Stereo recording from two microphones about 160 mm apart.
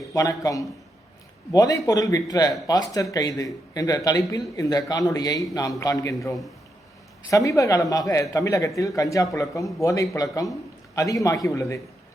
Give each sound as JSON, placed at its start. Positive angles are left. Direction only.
{"t": 0.1, "sound": "speech", "side_deg": 20}